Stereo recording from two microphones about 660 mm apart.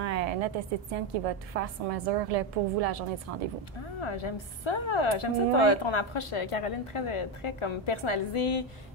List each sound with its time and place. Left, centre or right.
0.0 s a sound: right
0.9 s a woman's voice: right
4.0 s a woman's voice: left